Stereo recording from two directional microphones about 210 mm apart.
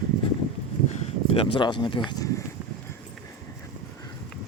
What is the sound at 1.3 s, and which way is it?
Speech, 25° left (ahead or behind).